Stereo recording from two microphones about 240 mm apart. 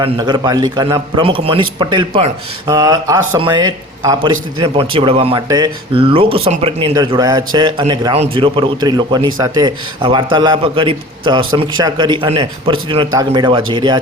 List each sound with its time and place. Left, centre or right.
0.0 s a man's voice: centre